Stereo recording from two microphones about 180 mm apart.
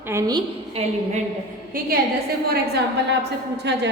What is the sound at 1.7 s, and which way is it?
Speech, 50° right (ahead or behind).